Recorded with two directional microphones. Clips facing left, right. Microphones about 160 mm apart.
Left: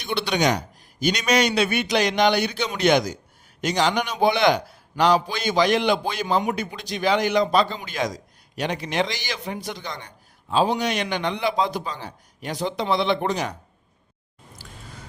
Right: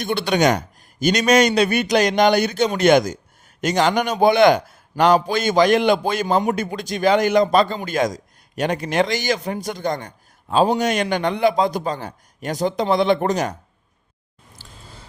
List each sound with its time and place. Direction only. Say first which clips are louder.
0.0 s a man's voice: right 4 dB; 45° right (ahead or behind)